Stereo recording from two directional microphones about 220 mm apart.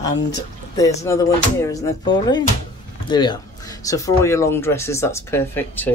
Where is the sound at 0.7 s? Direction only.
15° left (ahead or behind).